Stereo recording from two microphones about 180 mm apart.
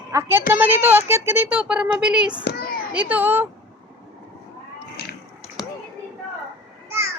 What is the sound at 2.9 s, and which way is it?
Speech, 10° right (ahead or behind).